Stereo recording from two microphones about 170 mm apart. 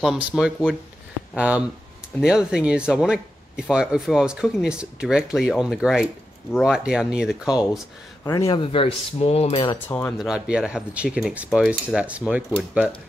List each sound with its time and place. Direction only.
0.0 s speech: 5° right (ahead or behind)
8.2 s speech: 20° left (ahead or behind)
8.7 s speech: 35° left (ahead or behind)
9.8 s speech: 10° left (ahead or behind)
10.1 s speech: 5° right (ahead or behind)